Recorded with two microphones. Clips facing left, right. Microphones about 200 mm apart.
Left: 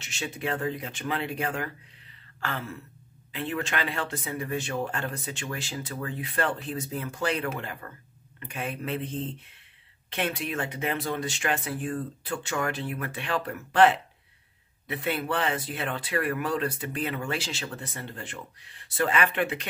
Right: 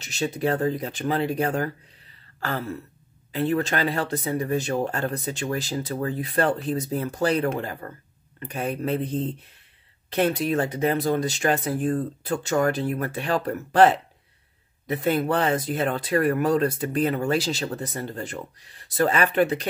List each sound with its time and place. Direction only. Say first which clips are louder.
0.0 s speech: right 8 dB; 40° right (ahead or behind)